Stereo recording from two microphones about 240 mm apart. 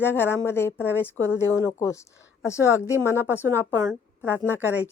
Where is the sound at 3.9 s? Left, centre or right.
Centre.